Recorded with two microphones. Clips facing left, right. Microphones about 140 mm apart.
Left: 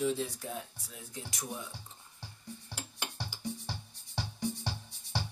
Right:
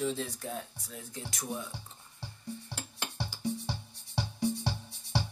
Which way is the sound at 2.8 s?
15° left (ahead or behind).